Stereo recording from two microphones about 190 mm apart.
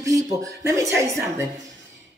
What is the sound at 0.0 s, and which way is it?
A woman's voice, 15° right (ahead or behind).